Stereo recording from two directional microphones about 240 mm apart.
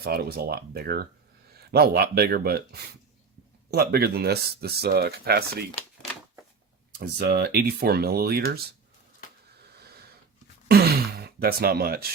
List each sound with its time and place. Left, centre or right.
0.0 s speech: right
3.7 s speech: right
7.0 s speech: right
10.7 s a sound: right